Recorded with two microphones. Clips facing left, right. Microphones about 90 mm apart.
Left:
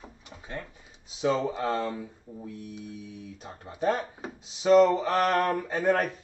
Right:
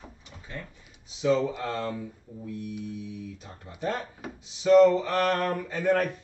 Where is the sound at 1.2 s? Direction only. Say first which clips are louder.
Right 1 dB; 35° left (ahead or behind).